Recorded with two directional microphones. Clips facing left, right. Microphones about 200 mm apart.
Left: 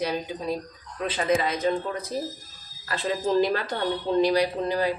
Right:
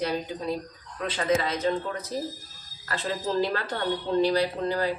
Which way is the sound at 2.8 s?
15° left (ahead or behind).